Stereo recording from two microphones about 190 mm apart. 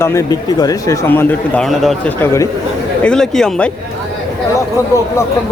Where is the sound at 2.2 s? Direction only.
15° left (ahead or behind).